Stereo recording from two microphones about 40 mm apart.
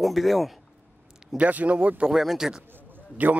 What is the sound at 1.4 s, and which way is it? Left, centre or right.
Speech, right.